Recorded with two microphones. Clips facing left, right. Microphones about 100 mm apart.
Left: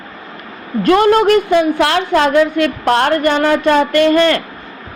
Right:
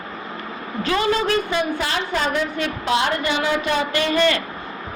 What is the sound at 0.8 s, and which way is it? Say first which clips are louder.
A woman's voice: left 10 dB; 60° left (ahead or behind).